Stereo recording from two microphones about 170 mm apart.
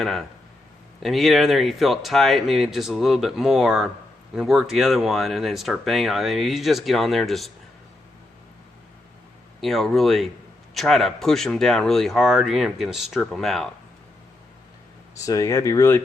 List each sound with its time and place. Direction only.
0.0 s speech: centre (ahead or behind)
9.6 s speech: centre (ahead or behind)
15.2 s speech: 20° left (ahead or behind)